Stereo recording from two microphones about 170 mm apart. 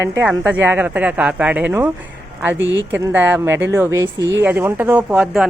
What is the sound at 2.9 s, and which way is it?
Speech, 10° right (ahead or behind).